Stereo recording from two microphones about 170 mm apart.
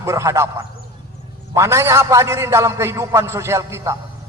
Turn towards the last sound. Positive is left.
turn(degrees=-15)  # may be behind; listen again after turning